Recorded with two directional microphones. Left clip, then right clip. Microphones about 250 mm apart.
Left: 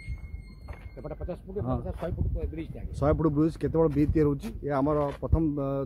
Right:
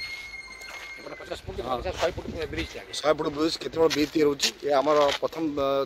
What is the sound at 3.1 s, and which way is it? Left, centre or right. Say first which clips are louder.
Speech: even; centre.